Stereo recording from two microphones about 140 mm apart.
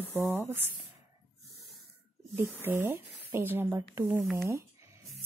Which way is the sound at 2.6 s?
15° right (ahead or behind).